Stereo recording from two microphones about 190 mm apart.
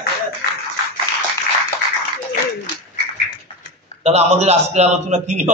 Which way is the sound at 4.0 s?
35° right (ahead or behind).